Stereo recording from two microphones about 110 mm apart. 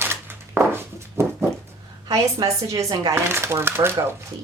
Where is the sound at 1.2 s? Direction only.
25° right (ahead or behind).